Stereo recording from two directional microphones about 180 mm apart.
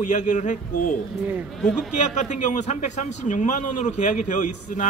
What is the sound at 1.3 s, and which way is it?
Speech, 10° right (ahead or behind).